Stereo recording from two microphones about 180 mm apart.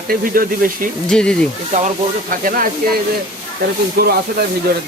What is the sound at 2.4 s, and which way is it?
Speech, 50° right (ahead or behind).